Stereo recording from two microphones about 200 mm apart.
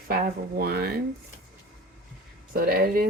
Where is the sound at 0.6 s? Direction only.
55° right (ahead or behind).